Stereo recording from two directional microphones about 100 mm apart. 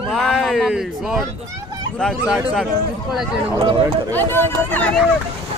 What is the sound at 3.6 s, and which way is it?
Speech, 60° right (ahead or behind).